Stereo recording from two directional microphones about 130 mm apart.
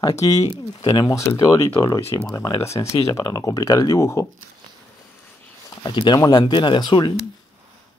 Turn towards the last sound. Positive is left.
turn(degrees=35)  # may be behind; listen again after turning